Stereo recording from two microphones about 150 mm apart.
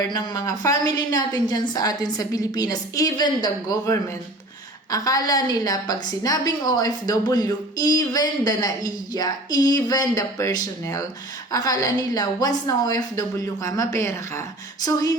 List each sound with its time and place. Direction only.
0.0 s a woman's voice: 25° left (ahead or behind)